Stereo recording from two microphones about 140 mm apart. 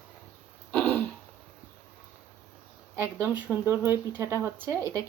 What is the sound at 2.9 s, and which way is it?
Speech, 15° right (ahead or behind).